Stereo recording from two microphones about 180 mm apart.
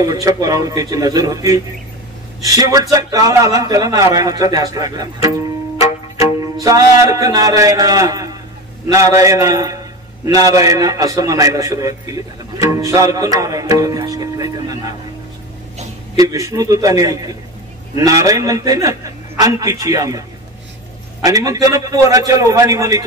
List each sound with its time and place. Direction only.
0.0 s a man's voice: 20° right (ahead or behind)
6.1 s music: 20° right (ahead or behind)
6.6 s a man's voice: 20° right (ahead or behind)
16.2 s a man's voice: 20° right (ahead or behind)